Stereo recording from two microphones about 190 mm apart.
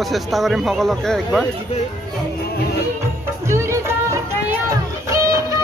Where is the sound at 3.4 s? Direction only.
15° right (ahead or behind).